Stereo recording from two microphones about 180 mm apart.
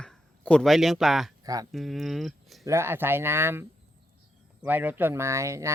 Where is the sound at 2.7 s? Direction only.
15° right (ahead or behind).